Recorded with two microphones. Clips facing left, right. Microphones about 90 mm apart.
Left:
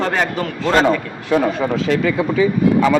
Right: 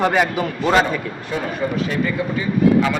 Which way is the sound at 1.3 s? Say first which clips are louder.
Left 7 dB; 90° left.